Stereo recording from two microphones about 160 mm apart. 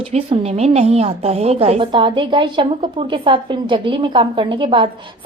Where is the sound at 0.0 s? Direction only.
40° right (ahead or behind).